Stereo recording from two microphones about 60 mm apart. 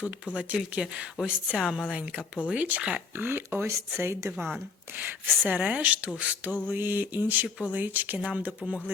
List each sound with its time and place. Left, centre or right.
0.8 s a woman's voice: centre
3.2 s speech: right
3.7 s speech: right
5.5 s speech: right